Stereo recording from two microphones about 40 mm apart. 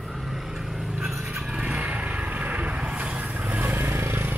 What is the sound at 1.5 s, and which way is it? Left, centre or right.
Vehicle, right.